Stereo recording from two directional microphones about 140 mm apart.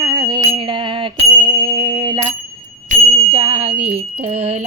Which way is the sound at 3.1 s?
45° right (ahead or behind).